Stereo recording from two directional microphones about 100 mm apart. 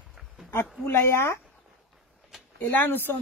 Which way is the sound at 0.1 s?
Centre (ahead or behind).